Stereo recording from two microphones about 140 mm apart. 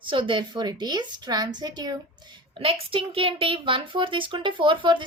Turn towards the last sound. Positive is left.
turn(degrees=-35)  # may be behind; listen again after turning